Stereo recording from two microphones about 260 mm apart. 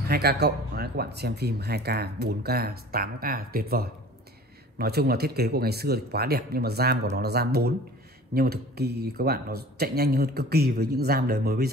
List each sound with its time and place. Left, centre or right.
0.1 s speech: right